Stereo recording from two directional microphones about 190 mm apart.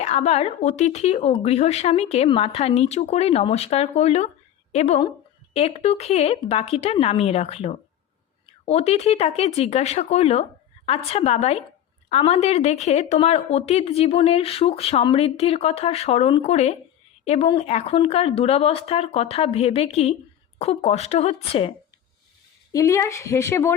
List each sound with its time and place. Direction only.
0.0 s a woman's voice: 35° left (ahead or behind)
22.7 s a woman's voice: 15° left (ahead or behind)